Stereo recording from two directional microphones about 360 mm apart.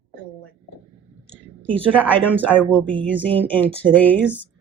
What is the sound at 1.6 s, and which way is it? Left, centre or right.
A woman's voice, centre.